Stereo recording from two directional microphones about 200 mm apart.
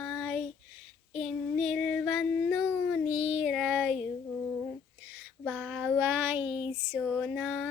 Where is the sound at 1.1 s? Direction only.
Centre (ahead or behind).